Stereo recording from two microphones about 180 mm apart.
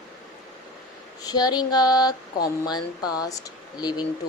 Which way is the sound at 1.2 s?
20° left (ahead or behind).